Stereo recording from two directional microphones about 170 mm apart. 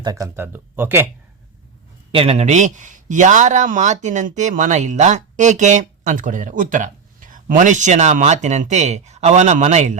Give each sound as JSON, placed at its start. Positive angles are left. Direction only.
{"t": 0.0, "sound": "speech", "side_deg": -20}
{"t": 2.1, "sound": "speech", "side_deg": -35}